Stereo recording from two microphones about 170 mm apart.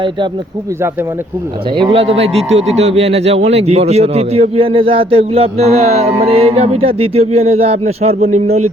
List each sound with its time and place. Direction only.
1.7 s a man's voice: 30° right (ahead or behind)